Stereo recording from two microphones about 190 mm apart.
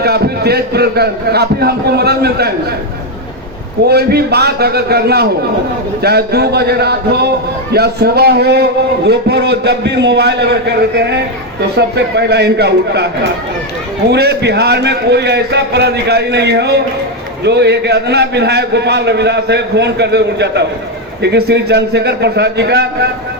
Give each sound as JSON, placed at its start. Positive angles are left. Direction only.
{"t": 0.0, "sound": "a man's voice", "side_deg": -55}
{"t": 3.8, "sound": "a man's voice", "side_deg": -55}
{"t": 14.1, "sound": "a man's voice", "side_deg": -60}